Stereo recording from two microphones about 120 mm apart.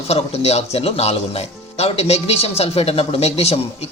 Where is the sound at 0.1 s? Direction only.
60° left (ahead or behind).